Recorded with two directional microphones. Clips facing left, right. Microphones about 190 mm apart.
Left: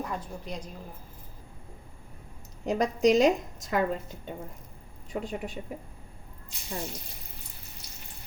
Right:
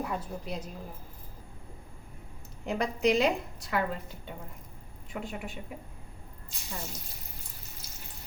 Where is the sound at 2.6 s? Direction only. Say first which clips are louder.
Left 4 dB; 40° left (ahead or behind).